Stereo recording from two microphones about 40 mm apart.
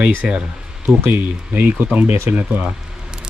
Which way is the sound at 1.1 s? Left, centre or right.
Right.